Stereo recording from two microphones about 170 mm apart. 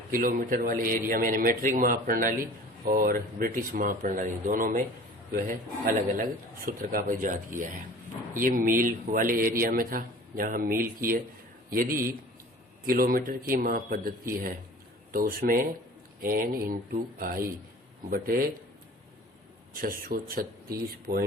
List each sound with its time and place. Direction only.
0.1 s a man's voice: 55° right (ahead or behind)
15.1 s a man's voice: 55° right (ahead or behind)
19.7 s a man's voice: 55° right (ahead or behind)